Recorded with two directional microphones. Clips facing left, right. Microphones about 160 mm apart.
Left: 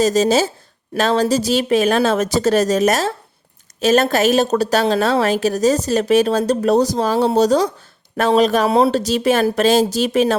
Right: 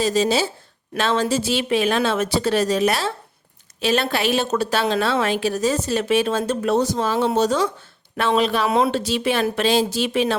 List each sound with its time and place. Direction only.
0.0 s a woman's voice: 40° left (ahead or behind)